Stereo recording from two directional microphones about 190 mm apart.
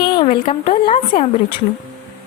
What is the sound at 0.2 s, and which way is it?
Speech, 30° left (ahead or behind).